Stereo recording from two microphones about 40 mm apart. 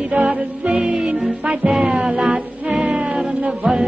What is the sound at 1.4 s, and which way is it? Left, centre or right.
Music, right.